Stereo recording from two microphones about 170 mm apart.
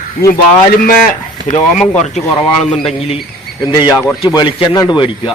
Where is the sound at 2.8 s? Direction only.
35° left (ahead or behind).